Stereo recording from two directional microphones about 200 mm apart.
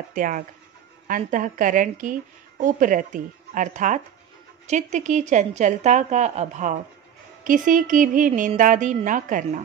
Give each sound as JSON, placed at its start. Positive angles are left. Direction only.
{"t": 0.1, "sound": "speech", "side_deg": -40}